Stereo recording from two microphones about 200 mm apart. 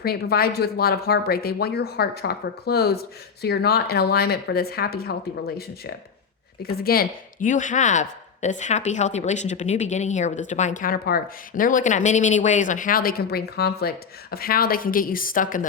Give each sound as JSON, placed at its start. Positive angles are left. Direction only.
{"t": 0.0, "sound": "speech", "side_deg": 50}